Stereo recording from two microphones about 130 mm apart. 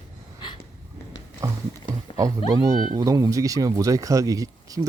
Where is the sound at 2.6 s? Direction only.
30° right (ahead or behind).